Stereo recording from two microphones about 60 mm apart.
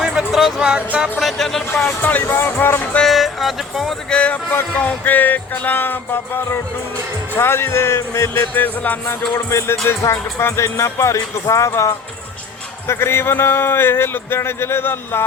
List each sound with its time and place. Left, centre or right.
0.0 s music: centre
0.6 s music: centre
1.2 s music: centre
2.0 s a man's voice: left
3.0 s speech: centre
4.1 s speech: centre
4.9 s a man's voice: left
9.5 s music: left
12.9 s a man's voice: left